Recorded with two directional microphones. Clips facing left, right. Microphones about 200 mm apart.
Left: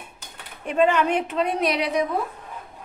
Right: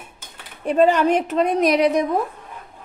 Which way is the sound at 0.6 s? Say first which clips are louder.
Right 4 dB; 35° right (ahead or behind).